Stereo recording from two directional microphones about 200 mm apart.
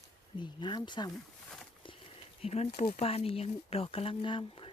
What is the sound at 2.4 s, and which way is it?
Speech, 30° left (ahead or behind).